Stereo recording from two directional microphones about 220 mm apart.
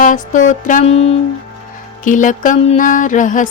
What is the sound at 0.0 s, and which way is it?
Music, 35° left (ahead or behind).